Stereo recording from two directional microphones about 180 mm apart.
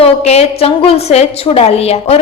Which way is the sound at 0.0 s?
35° left (ahead or behind).